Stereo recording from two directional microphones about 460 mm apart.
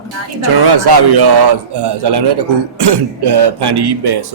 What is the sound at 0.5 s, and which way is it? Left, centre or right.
Speech, right.